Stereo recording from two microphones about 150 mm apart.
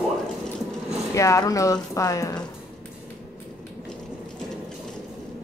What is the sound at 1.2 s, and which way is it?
Speech, 20° left (ahead or behind).